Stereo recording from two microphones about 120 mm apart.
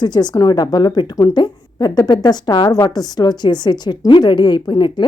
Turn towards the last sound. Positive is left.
turn(degrees=40)  # may be behind; listen again after turning